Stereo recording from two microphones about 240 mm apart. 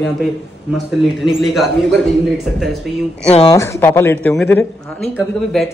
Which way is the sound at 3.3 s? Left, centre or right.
Left.